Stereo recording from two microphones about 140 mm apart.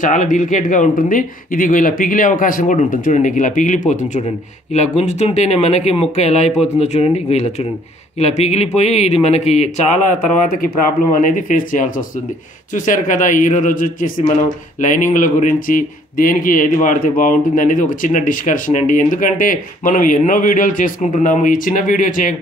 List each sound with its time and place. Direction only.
0.0 s speech: 65° left (ahead or behind)
14.8 s speech: 65° left (ahead or behind)